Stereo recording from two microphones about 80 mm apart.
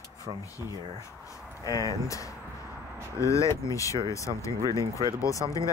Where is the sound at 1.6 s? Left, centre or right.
Left.